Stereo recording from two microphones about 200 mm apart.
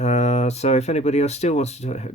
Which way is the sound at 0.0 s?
35° left (ahead or behind).